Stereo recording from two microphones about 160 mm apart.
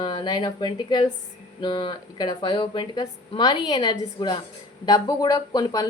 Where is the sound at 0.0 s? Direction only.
30° left (ahead or behind).